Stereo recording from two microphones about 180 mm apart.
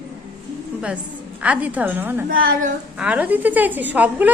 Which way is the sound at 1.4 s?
10° right (ahead or behind).